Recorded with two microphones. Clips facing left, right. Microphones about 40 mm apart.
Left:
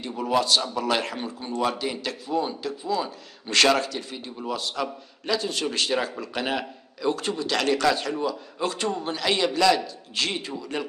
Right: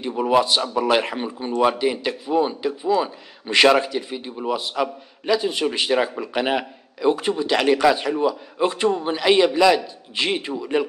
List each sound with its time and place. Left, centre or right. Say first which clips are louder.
0.0 s a man's voice: right 6 dB; right